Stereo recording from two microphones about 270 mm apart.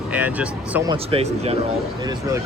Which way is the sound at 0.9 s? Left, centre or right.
Right.